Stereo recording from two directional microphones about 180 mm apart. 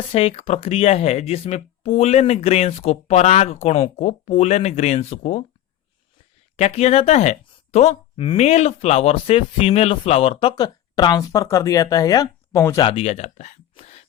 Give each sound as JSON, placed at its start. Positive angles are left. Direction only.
{"t": 0.1, "sound": "speech", "side_deg": 35}
{"t": 6.6, "sound": "speech", "side_deg": 35}
{"t": 10.5, "sound": "speech", "side_deg": 20}
{"t": 12.8, "sound": "speech", "side_deg": 30}